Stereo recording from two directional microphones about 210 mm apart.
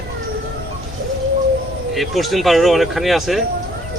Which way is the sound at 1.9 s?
Centre (ahead or behind).